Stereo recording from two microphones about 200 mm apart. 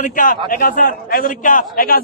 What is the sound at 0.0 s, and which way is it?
A man's voice, 40° left (ahead or behind).